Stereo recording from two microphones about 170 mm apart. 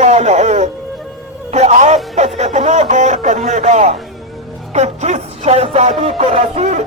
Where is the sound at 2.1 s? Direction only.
40° right (ahead or behind).